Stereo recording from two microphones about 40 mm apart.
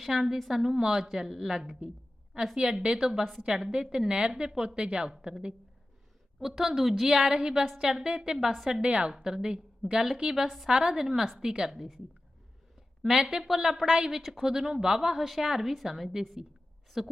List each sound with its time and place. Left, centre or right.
0.0 s a woman's voice: centre
2.6 s a woman's voice: centre
6.4 s a woman's voice: centre
7.1 s a woman's voice: centre
8.8 s speech: right
9.1 s a woman's voice: centre
11.5 s a woman's voice: centre
13.1 s a woman's voice: centre
13.8 s a woman's voice: right